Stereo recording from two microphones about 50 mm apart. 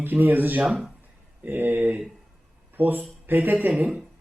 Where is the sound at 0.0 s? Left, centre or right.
Right.